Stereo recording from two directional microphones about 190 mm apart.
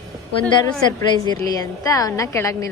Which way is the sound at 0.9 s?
20° left (ahead or behind).